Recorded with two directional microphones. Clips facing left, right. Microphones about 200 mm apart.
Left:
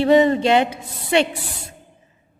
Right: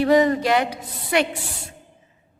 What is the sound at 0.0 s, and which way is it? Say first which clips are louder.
A woman's voice: left 2 dB; 25° left (ahead or behind).